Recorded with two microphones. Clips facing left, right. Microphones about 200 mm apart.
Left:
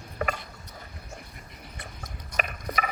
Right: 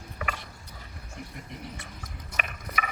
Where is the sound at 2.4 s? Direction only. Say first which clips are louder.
Left 5 dB; 35° left (ahead or behind).